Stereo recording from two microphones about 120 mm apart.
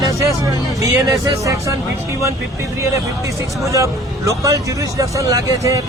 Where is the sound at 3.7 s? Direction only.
25° right (ahead or behind).